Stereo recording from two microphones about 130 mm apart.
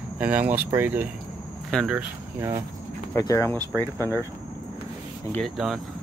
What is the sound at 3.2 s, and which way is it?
Speech, 25° left (ahead or behind).